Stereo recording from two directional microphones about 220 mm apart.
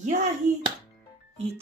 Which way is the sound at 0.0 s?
35° right (ahead or behind).